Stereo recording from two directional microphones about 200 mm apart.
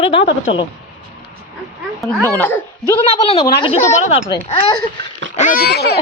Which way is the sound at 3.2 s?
30° left (ahead or behind).